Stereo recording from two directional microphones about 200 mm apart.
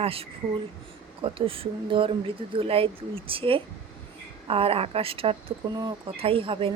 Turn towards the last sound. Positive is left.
turn(degrees=-25)  # may be behind; listen again after turning